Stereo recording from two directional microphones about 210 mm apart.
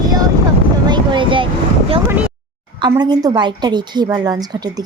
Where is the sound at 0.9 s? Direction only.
20° right (ahead or behind).